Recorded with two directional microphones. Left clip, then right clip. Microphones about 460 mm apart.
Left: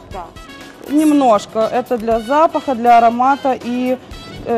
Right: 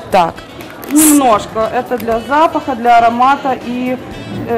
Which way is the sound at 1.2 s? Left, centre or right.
Left.